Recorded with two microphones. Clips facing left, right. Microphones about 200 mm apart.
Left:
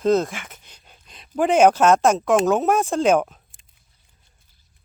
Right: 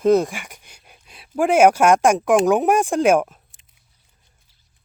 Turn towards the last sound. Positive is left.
turn(degrees=-10)  # may be behind; listen again after turning